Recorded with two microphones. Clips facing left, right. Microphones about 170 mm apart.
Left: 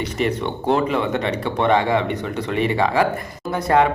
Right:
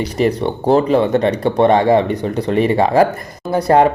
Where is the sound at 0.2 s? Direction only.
35° right (ahead or behind).